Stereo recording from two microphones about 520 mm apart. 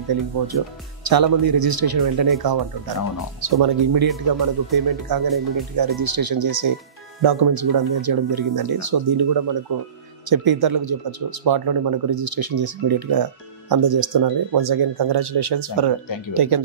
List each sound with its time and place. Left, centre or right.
1.0 s speech: right